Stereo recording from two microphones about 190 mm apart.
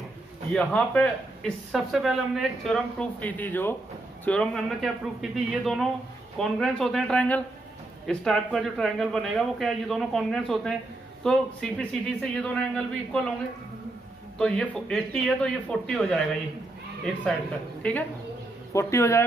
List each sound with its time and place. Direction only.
0.5 s speech: 5° left (ahead or behind)
14.4 s speech: 5° left (ahead or behind)